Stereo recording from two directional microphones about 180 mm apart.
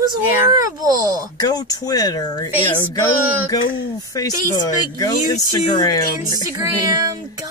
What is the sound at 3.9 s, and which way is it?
Speech, 20° left (ahead or behind).